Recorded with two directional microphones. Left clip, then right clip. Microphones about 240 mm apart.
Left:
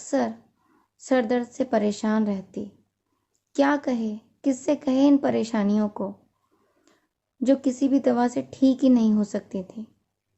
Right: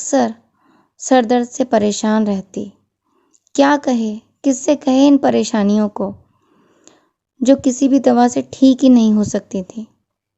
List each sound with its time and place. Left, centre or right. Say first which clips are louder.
0.0 s a woman's voice: right 10 dB; right
6.9 s clicking: right 13 dB; right
7.4 s a woman's voice: right 9 dB; right